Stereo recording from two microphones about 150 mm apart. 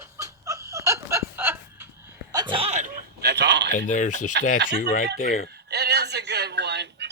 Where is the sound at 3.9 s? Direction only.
55° left (ahead or behind).